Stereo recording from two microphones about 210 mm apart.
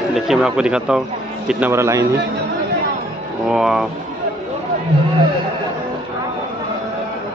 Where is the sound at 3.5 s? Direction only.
Centre (ahead or behind).